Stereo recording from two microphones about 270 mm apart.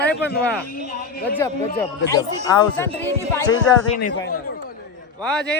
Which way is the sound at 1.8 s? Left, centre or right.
Centre.